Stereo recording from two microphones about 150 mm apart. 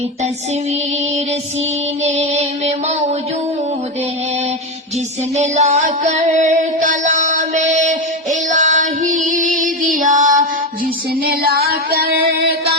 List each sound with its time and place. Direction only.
2.0 s music: 50° right (ahead or behind)
5.4 s music: 50° right (ahead or behind)
11.2 s music: 85° right